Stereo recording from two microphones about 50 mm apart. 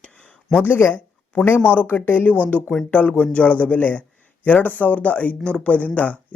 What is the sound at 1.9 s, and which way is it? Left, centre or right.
Speech, left.